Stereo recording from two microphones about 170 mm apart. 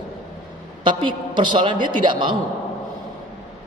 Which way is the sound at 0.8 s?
30° right (ahead or behind).